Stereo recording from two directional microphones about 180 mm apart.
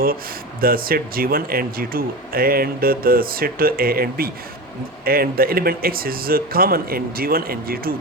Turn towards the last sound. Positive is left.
turn(degrees=-55)  # may be behind; listen again after turning